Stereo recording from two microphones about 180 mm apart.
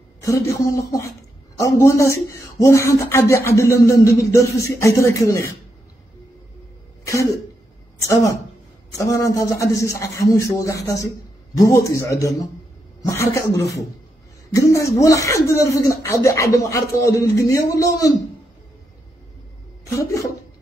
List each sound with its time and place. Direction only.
0.2 s a man's voice: 15° left (ahead or behind)
1.6 s speech: 15° left (ahead or behind)
7.1 s a woman's voice: 15° left (ahead or behind)